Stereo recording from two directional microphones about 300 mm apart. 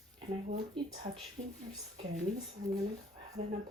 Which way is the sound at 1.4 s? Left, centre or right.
Right.